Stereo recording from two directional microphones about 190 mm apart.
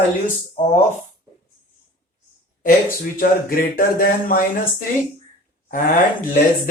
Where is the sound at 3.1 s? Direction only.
50° left (ahead or behind).